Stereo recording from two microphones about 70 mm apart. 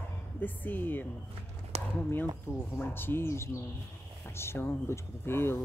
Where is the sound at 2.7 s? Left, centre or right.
Left.